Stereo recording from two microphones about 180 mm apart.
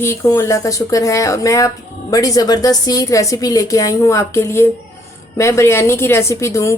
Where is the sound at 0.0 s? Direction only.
15° left (ahead or behind).